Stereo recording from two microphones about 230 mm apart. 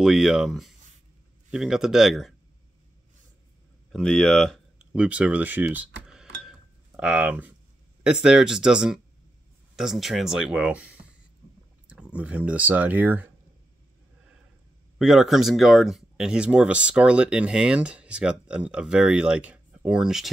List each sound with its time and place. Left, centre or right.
0.0 s speech: centre
3.9 s speech: centre
6.0 s a sound: centre
7.0 s speech: centre
15.0 s speech: centre